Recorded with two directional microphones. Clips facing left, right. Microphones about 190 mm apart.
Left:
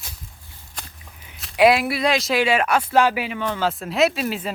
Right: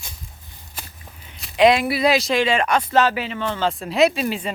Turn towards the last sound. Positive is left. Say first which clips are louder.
# right 2 dB
turn(degrees=0)  # may be behind; listen again after turning